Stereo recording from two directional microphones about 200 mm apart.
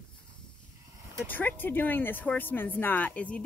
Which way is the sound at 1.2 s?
10° left (ahead or behind).